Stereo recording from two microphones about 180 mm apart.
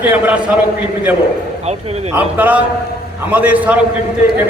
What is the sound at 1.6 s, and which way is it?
Speech, 35° right (ahead or behind).